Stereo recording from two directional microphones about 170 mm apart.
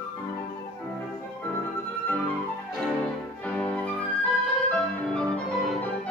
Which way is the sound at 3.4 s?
10° left (ahead or behind).